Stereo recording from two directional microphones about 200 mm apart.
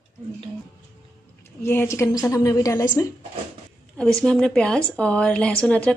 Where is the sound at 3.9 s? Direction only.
5° left (ahead or behind).